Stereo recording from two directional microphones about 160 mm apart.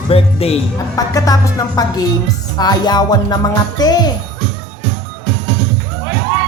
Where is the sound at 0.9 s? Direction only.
20° left (ahead or behind).